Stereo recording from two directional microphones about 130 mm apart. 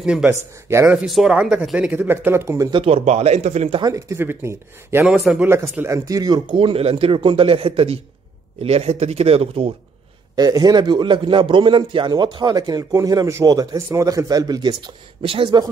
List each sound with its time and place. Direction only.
0.0 s speech: 5° right (ahead or behind)
0.3 s speech: 20° right (ahead or behind)
0.9 s speech: 5° right (ahead or behind); by 2.7 s 25° right (ahead or behind)
2.7 s speech: 50° right (ahead or behind)
3.8 s speech: 25° right (ahead or behind)
5.5 s speech: 20° right (ahead or behind); by 9.7 s 50° right (ahead or behind)
10.3 s a man's voice: 30° right (ahead or behind)